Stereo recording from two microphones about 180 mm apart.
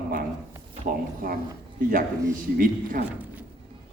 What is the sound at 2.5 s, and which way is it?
Speech, 50° right (ahead or behind).